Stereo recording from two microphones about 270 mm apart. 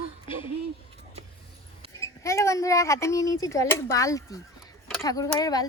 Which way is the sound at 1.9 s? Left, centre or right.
Centre.